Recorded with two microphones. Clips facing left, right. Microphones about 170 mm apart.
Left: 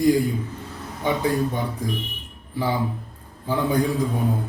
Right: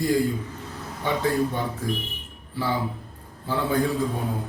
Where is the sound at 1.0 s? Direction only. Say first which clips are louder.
Left 3 dB; 15° left (ahead or behind).